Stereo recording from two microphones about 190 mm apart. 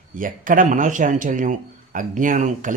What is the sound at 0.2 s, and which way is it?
Speech, 45° right (ahead or behind).